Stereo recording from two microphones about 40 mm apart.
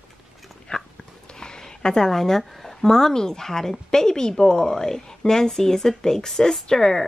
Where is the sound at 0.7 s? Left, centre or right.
Left.